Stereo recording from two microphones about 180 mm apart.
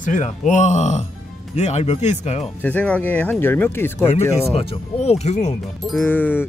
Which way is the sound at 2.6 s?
10° left (ahead or behind).